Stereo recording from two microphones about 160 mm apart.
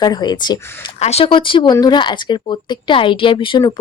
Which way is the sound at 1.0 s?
40° left (ahead or behind).